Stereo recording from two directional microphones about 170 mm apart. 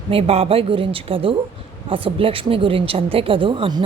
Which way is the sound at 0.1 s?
35° right (ahead or behind).